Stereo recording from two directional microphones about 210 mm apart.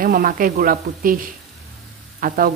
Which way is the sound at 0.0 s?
45° right (ahead or behind).